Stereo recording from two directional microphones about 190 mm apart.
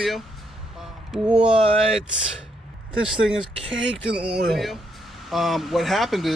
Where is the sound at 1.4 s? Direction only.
30° right (ahead or behind).